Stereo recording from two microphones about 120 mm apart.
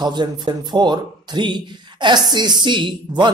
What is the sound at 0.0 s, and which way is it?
Speech, 35° right (ahead or behind).